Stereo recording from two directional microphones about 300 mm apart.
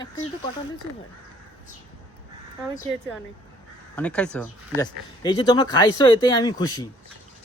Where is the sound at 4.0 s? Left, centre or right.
Centre.